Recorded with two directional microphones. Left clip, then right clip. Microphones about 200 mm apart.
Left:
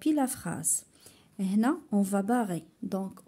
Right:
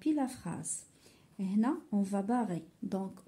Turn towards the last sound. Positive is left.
turn(degrees=25)  # may be behind; listen again after turning